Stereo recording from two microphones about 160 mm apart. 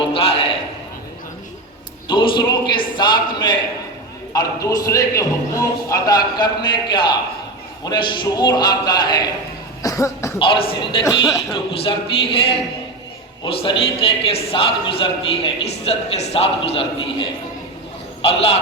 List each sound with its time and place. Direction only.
0.1 s a sound: 35° left (ahead or behind)
2.0 s a man's voice: 30° left (ahead or behind)
9.8 s cough: 20° left (ahead or behind)
10.4 s a man's voice: 35° left (ahead or behind)